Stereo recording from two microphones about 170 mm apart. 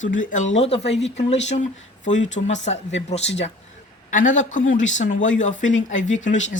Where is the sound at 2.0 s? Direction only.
90° left.